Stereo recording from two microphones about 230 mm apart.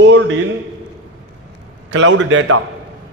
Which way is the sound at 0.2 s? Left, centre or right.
Right.